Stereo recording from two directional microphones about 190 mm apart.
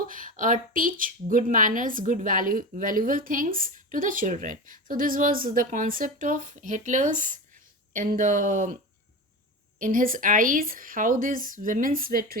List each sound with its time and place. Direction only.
0.0 s a woman's voice: 45° right (ahead or behind)
9.7 s a woman's voice: 45° right (ahead or behind)